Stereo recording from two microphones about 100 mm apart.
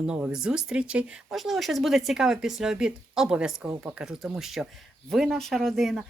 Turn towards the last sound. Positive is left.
turn(degrees=0)  # may be behind; listen again after turning